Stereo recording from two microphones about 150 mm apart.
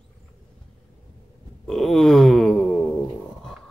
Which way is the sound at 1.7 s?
Centre (ahead or behind).